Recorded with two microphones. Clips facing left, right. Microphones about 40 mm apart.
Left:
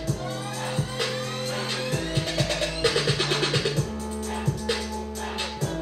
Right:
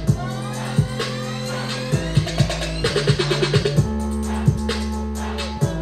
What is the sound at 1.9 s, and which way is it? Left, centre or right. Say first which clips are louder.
Music: right 4 dB; centre.